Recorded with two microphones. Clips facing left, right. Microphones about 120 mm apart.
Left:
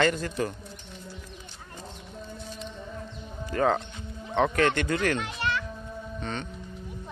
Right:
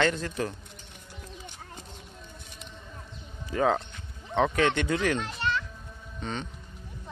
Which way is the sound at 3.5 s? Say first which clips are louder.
Left 1 dB; centre (ahead or behind).